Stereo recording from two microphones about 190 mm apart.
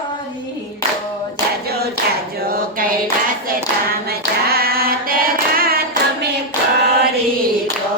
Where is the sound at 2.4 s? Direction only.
50° right (ahead or behind).